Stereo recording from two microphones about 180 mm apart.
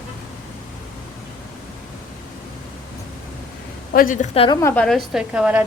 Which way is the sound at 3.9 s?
45° left (ahead or behind).